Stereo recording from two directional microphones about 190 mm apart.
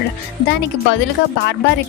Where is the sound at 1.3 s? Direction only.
65° left (ahead or behind).